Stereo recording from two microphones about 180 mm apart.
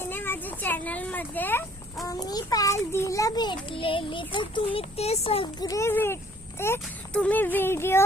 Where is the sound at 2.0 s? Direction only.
20° left (ahead or behind).